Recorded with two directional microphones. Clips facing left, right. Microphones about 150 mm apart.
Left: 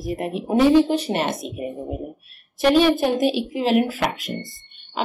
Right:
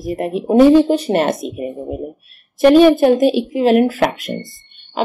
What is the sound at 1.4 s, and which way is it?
Speech, 5° right (ahead or behind).